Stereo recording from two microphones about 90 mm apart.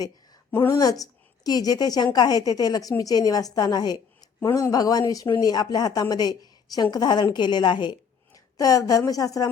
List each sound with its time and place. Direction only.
0.7 s a woman's voice: 45° left (ahead or behind)
8.5 s a woman's voice: 40° left (ahead or behind)